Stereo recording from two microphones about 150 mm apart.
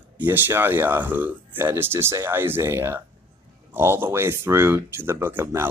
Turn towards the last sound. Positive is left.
turn(degrees=-15)  # may be behind; listen again after turning